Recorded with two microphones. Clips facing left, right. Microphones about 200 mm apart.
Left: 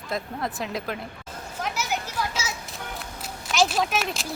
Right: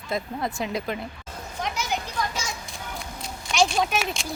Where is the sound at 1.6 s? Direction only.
5° left (ahead or behind).